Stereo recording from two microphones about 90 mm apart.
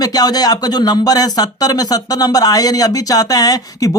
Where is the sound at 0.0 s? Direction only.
45° left (ahead or behind).